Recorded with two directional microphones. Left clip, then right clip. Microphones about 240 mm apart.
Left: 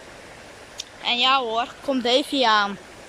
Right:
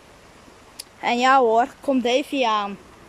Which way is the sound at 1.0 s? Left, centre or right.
Right.